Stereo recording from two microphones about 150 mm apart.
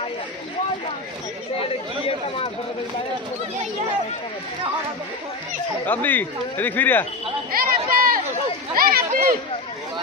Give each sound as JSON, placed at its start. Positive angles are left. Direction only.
{"t": 2.0, "sound": "speech", "side_deg": 40}
{"t": 5.9, "sound": "speech", "side_deg": 10}
{"t": 7.5, "sound": "chatter", "side_deg": -70}
{"t": 8.7, "sound": "speech", "side_deg": -75}